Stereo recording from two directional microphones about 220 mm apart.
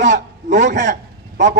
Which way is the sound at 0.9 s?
45° right (ahead or behind).